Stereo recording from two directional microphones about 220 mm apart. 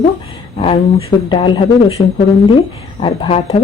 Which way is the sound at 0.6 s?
25° left (ahead or behind).